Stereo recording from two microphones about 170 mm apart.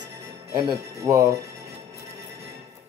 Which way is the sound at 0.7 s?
15° right (ahead or behind).